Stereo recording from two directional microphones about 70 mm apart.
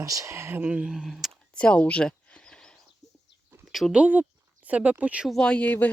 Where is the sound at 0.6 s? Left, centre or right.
Centre.